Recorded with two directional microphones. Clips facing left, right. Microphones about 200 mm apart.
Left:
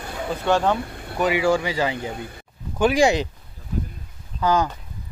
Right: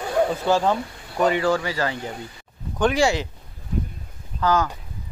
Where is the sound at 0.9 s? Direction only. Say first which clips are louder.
Left 4 dB; 60° left (ahead or behind).